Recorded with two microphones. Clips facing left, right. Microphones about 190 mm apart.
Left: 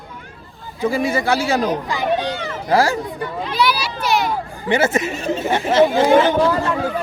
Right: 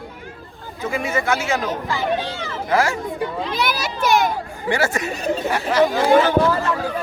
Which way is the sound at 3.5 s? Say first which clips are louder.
Left 6 dB; 50° right (ahead or behind).